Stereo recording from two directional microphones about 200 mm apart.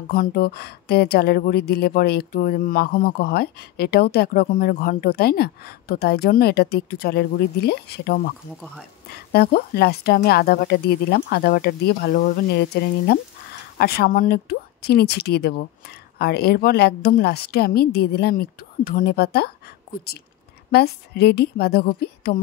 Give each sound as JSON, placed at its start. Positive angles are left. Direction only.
{"t": 0.1, "sound": "a woman's voice", "side_deg": 50}